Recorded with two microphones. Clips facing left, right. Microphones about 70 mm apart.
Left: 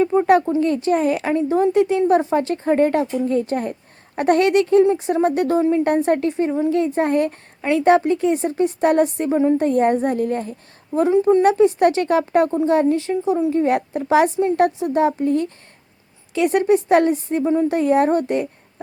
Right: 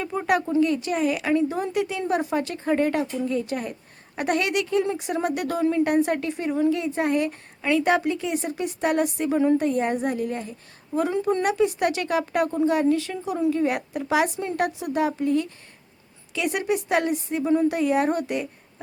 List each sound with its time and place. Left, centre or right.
0.0 s speech: left
11.1 s a woman's voice: left
11.4 s a woman's voice: left